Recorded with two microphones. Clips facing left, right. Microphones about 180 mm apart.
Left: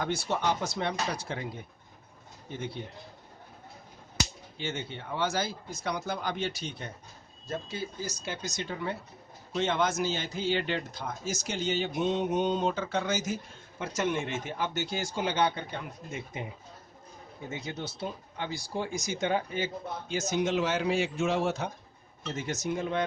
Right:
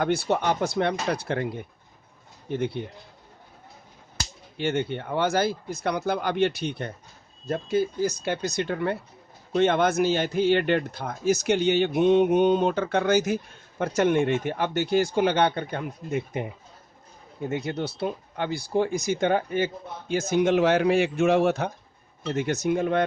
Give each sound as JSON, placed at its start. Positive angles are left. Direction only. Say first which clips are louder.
{"t": 0.0, "sound": "a man's voice", "louder": "right 6 dB", "side_deg": -60}
{"t": 2.5, "sound": "a man's voice", "louder": "right 9 dB", "side_deg": -60}
{"t": 4.5, "sound": "a man's voice", "louder": "right 10 dB", "side_deg": -60}
{"t": 17.5, "sound": "a man's voice", "louder": "right 8 dB", "side_deg": -60}